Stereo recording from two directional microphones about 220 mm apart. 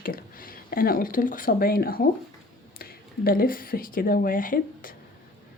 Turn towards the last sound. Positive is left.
turn(degrees=40)  # may be behind; listen again after turning